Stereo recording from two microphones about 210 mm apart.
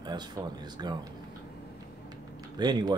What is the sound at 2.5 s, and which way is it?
Speech, 20° right (ahead or behind).